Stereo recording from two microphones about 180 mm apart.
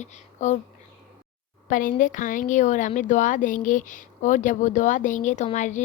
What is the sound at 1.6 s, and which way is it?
Speech, 50° left (ahead or behind).